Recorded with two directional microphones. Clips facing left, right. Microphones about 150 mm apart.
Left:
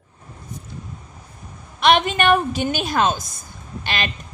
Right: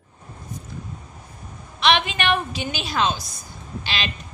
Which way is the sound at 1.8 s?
45° left (ahead or behind).